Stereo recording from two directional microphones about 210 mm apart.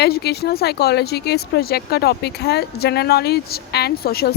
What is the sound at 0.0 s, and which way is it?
Speech, 50° left (ahead or behind).